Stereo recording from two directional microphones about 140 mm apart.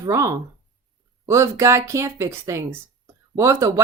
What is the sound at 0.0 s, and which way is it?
Speech, 20° right (ahead or behind).